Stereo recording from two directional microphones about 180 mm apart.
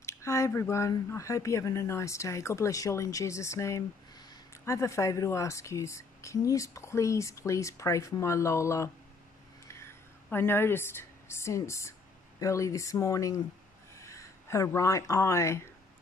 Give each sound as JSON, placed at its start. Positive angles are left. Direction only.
{"t": 0.0, "sound": "a woman's voice", "side_deg": 15}